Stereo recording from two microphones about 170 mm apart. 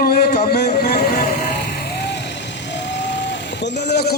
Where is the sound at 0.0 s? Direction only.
60° left (ahead or behind).